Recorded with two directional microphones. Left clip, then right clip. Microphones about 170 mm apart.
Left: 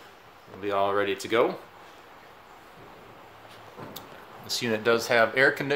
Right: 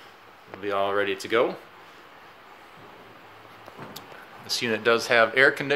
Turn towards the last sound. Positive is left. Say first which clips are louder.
# right 2 dB
turn(degrees=5)  # may be behind; listen again after turning